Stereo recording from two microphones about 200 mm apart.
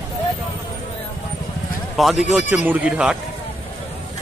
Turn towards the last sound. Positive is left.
turn(degrees=-5)  # may be behind; listen again after turning